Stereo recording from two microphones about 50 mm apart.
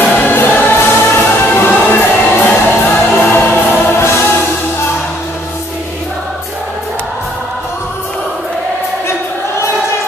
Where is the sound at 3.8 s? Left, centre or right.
Left.